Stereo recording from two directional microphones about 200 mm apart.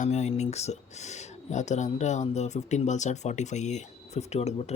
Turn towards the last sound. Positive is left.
turn(degrees=35)  # may be behind; listen again after turning